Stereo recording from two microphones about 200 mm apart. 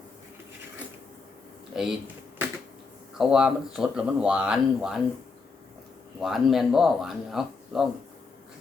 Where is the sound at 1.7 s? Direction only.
Centre (ahead or behind).